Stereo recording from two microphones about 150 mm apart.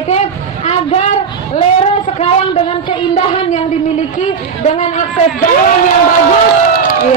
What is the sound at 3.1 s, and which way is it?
Child singing, 45° left (ahead or behind).